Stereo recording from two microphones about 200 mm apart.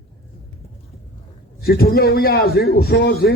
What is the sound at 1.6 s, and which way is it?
A man's voice, 50° left (ahead or behind).